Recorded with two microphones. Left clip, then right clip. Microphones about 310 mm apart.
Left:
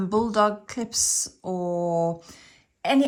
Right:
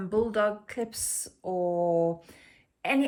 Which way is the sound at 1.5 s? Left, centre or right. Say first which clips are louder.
Even; left.